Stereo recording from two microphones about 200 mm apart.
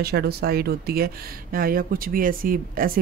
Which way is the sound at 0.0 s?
50° right (ahead or behind).